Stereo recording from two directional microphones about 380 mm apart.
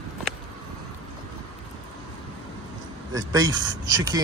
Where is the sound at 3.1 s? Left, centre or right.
Centre.